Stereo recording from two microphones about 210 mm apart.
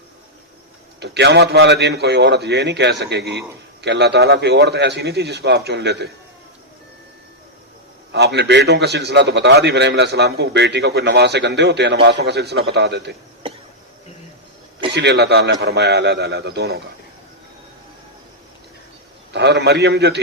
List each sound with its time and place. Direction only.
0.9 s a man's voice: 55° right (ahead or behind)
8.1 s a man's voice: 55° right (ahead or behind)
14.9 s a man's voice: 50° right (ahead or behind)
19.3 s a man's voice: 55° right (ahead or behind)